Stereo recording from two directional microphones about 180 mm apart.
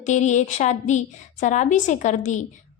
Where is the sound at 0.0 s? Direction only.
40° left (ahead or behind).